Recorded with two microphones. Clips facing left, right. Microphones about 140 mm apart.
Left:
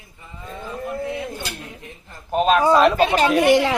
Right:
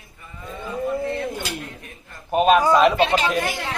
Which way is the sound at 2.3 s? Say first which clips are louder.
Right 1 dB; 5° right (ahead or behind).